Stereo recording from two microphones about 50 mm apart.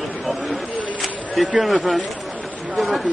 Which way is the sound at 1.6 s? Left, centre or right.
Centre.